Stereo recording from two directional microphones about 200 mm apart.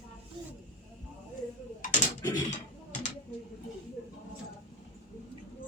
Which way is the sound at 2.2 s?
15° left (ahead or behind).